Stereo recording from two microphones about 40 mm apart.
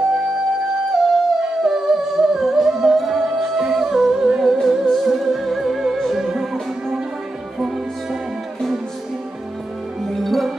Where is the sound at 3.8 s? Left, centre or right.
Centre.